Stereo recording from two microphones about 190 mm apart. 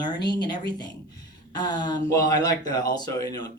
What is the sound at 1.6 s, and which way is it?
A woman's voice, 20° left (ahead or behind).